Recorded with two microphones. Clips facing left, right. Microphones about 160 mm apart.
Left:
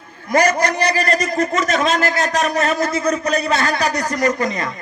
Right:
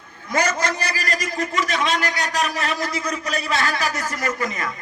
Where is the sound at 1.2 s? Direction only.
40° left (ahead or behind).